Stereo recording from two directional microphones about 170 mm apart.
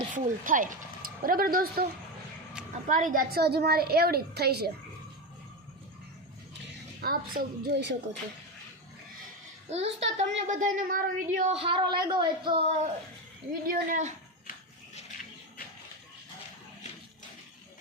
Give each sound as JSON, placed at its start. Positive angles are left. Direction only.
{"t": 0.1, "sound": "speech", "side_deg": -50}
{"t": 2.9, "sound": "a child's voice", "side_deg": -50}
{"t": 7.0, "sound": "a woman's voice", "side_deg": -65}
{"t": 9.6, "sound": "a child's voice", "side_deg": -40}
{"t": 13.5, "sound": "a woman's voice", "side_deg": -60}